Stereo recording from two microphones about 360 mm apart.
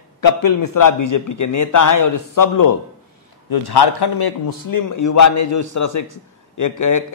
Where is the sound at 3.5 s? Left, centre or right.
Left.